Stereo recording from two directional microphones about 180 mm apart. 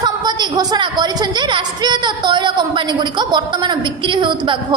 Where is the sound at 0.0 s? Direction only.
25° right (ahead or behind).